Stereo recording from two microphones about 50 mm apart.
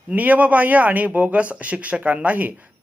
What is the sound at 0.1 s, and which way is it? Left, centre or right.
Speech, right.